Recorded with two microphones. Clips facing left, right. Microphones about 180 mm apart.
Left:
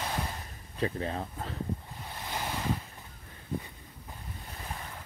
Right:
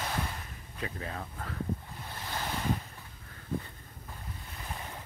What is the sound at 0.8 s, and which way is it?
Speech, 30° left (ahead or behind).